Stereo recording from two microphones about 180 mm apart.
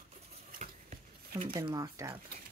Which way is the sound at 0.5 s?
50° right (ahead or behind).